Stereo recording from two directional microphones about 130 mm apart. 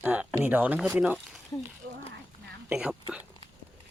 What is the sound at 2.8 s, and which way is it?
Speech, 5° right (ahead or behind).